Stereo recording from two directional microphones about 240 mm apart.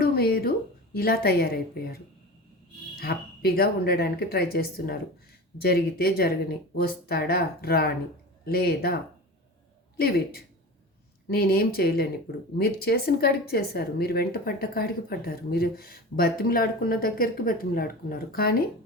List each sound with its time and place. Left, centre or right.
0.0 s a sound: left
0.9 s speech: left
10.0 s speech: left